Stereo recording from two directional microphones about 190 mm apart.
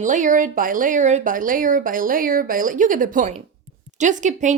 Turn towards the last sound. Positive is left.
turn(degrees=-40)  # may be behind; listen again after turning